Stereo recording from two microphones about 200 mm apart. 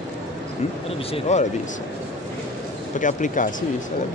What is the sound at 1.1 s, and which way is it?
Speech, 35° left (ahead or behind).